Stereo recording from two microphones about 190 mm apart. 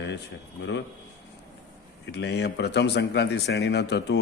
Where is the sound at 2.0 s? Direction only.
60° left (ahead or behind).